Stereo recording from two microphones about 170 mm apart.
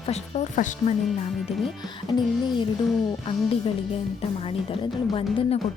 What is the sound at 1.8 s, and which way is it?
Music, 25° left (ahead or behind).